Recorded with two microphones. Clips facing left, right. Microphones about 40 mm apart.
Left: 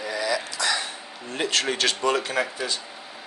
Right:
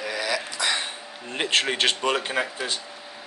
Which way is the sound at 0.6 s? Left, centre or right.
Right.